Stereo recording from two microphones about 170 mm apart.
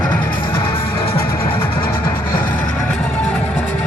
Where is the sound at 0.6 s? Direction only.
30° left (ahead or behind).